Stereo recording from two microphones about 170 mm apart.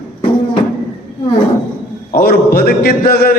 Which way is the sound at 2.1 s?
65° left (ahead or behind).